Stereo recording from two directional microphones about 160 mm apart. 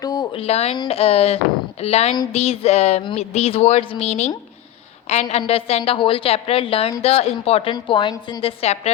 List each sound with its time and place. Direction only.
0.0 s a sound: 25° left (ahead or behind)
0.3 s speech: 40° left (ahead or behind)
5.4 s speech: 35° left (ahead or behind)